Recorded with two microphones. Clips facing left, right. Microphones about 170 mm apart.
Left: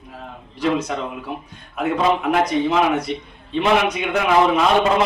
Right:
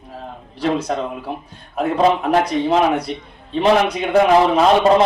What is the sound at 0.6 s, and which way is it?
A man's voice, 35° right (ahead or behind).